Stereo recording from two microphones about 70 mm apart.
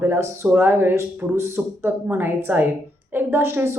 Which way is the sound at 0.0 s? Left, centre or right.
Right.